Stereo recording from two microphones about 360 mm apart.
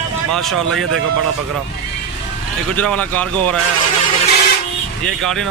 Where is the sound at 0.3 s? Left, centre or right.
Centre.